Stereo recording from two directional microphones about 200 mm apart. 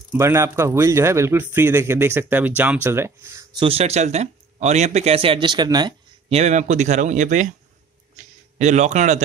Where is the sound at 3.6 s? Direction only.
30° right (ahead or behind).